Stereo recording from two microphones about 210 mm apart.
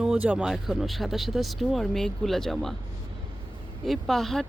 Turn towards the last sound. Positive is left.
turn(degrees=0)  # may be behind; listen again after turning